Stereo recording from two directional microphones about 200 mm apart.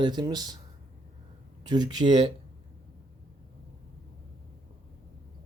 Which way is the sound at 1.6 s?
20° right (ahead or behind).